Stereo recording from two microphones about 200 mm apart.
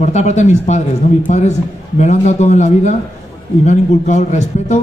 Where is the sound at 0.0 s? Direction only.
35° left (ahead or behind).